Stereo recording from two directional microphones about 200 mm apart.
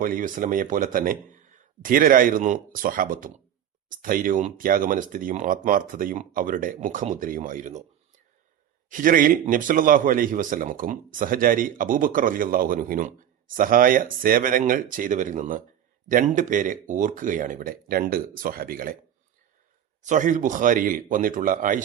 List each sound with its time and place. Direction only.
0.0 s a man's voice: 45° right (ahead or behind)
8.9 s a man's voice: 45° right (ahead or behind)
20.0 s speech: 40° right (ahead or behind)